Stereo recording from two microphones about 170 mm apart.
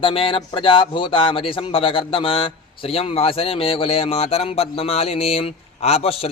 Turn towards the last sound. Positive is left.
turn(degrees=35)  # may be behind; listen again after turning